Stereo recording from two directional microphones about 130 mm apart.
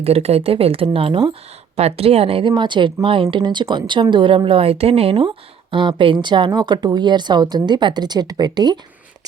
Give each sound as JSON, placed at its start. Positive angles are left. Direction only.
{"t": 0.0, "sound": "speech", "side_deg": -50}
{"t": 2.5, "sound": "speech", "side_deg": -35}